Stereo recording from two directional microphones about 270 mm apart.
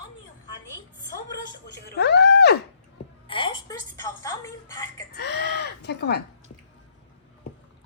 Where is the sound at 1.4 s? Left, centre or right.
Left.